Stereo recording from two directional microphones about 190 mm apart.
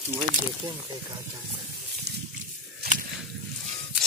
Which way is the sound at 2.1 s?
60° right (ahead or behind).